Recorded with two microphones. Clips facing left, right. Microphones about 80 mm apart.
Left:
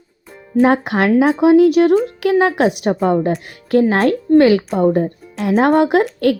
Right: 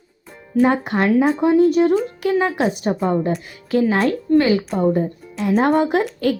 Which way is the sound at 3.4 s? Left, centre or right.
Left.